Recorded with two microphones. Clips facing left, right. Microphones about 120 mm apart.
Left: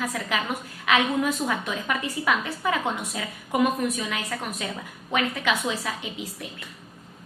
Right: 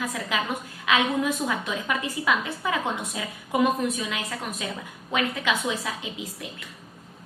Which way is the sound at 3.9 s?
20° right (ahead or behind).